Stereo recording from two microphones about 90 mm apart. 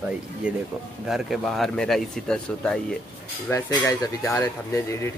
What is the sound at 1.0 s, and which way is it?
Speech, 5° right (ahead or behind).